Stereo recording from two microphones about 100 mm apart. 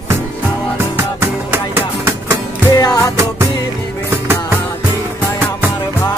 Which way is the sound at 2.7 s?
35° left (ahead or behind).